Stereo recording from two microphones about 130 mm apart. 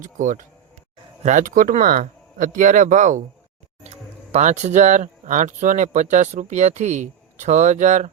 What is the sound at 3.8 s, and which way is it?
Speech, 60° right (ahead or behind).